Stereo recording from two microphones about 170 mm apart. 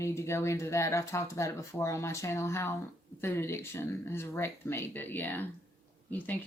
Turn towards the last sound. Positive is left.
turn(degrees=10)  # may be behind; listen again after turning